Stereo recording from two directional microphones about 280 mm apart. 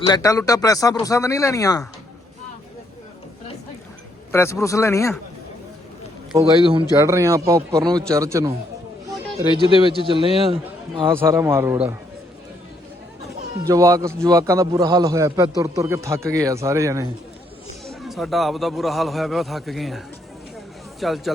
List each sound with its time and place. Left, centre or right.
0.1 s speech: centre
4.3 s speech: centre
6.3 s a man's voice: centre
9.6 s a man's voice: centre
11.1 s a man's voice: centre
13.7 s a man's voice: centre
17.8 s a man's voice: centre
21.0 s a man's voice: centre